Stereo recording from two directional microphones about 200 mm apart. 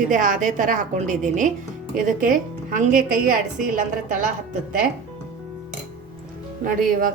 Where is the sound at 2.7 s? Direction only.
45° right (ahead or behind).